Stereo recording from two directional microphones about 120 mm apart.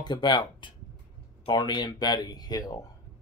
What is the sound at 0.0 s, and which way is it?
Speech, 35° left (ahead or behind).